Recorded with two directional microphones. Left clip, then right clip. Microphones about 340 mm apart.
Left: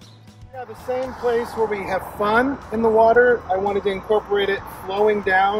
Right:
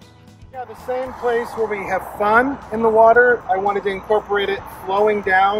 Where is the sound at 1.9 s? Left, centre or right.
Centre.